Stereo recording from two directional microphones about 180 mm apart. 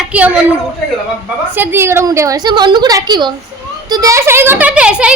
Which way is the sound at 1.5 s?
10° right (ahead or behind).